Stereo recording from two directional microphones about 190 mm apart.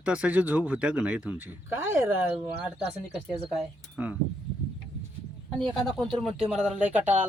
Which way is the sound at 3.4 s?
5° right (ahead or behind).